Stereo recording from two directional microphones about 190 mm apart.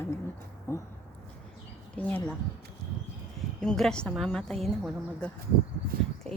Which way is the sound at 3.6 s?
5° left (ahead or behind).